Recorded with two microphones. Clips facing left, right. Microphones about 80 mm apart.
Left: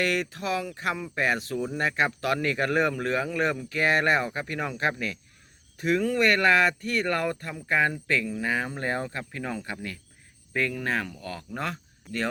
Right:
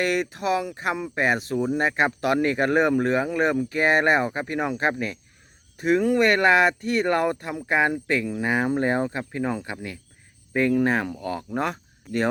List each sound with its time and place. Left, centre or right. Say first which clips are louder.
0.0 s speech: right 3 dB; centre